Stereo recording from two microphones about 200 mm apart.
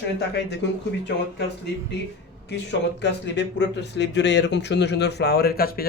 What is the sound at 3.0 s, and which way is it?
Speech, 60° left (ahead or behind).